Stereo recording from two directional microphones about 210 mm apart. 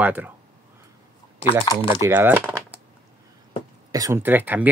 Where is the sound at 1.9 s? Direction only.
10° right (ahead or behind).